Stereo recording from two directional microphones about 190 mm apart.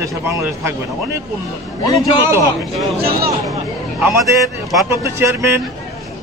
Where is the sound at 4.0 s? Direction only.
10° right (ahead or behind).